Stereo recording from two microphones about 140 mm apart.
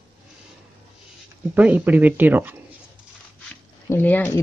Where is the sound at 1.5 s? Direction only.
10° right (ahead or behind).